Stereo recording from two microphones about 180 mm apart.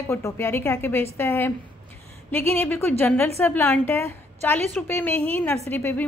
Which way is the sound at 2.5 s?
10° left (ahead or behind).